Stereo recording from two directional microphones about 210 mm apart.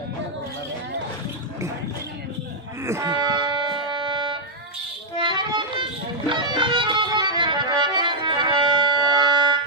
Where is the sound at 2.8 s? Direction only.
15° right (ahead or behind).